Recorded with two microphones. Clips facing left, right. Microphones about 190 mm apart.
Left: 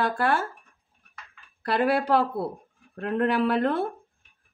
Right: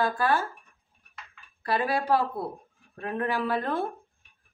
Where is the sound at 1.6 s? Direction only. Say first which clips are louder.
Left 3 dB; 70° left (ahead or behind).